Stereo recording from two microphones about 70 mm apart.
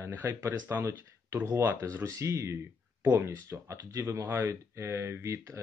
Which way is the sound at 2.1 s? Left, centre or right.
Right.